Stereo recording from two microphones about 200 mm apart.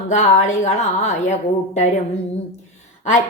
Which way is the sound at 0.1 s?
35° left (ahead or behind).